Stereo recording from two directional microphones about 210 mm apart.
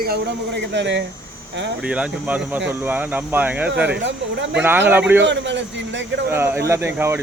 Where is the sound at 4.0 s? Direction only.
60° right (ahead or behind).